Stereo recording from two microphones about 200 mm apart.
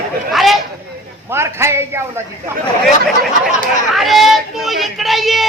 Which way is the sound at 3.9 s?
Centre (ahead or behind).